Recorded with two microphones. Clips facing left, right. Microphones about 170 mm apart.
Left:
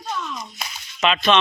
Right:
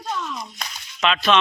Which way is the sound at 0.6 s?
5° left (ahead or behind).